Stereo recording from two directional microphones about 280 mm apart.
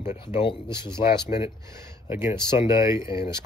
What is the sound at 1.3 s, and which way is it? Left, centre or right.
Speech, centre.